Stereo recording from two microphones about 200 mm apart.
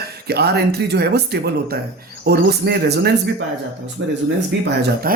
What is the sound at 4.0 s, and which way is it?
Speech, 70° right (ahead or behind).